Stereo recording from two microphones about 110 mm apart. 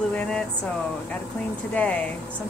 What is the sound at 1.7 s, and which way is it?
Speech, 15° left (ahead or behind).